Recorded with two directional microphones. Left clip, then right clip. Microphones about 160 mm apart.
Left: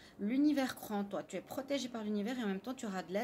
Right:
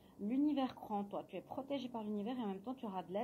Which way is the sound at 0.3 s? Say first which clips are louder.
Left 4 dB; 35° left (ahead or behind).